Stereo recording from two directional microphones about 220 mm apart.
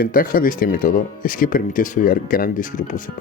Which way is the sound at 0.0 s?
40° left (ahead or behind).